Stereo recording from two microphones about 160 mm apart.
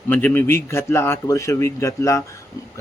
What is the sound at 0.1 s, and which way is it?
Speech, 10° left (ahead or behind).